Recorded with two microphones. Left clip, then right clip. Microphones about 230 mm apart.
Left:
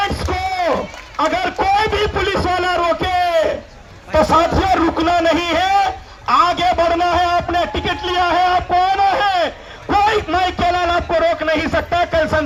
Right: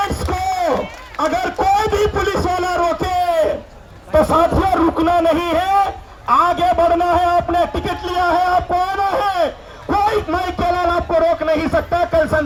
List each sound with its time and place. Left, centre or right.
0.1 s a sound: right
1.2 s music: right
4.1 s a man's voice: right